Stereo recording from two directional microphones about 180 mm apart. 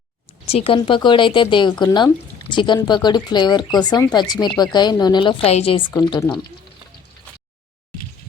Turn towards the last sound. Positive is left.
turn(degrees=25)  # may be behind; listen again after turning